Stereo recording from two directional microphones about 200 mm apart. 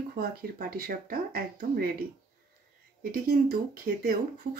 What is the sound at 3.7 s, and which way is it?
Speech, 45° right (ahead or behind).